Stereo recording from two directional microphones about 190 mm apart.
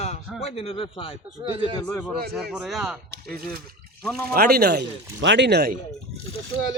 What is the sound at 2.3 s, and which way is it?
Speech, 5° right (ahead or behind).